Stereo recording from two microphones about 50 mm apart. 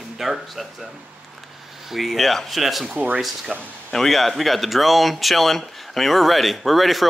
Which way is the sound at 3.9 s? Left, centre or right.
Centre.